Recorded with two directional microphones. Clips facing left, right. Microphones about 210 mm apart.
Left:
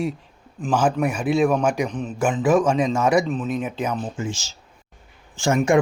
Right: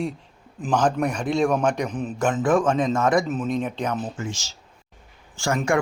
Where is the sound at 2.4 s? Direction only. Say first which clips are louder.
Left 2 dB; 10° left (ahead or behind).